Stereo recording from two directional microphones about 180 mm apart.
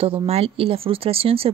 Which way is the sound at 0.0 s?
30° right (ahead or behind).